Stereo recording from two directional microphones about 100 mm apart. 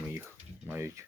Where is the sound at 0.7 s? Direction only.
20° right (ahead or behind).